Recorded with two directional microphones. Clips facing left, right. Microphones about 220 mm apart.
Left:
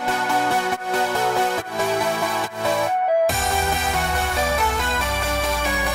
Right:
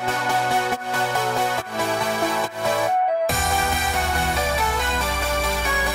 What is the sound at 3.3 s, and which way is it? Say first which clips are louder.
Music: left 1 dB; centre (ahead or behind).